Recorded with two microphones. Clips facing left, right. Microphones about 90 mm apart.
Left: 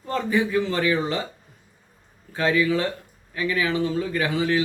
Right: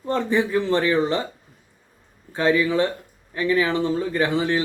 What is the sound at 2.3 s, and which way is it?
Speech, 25° right (ahead or behind).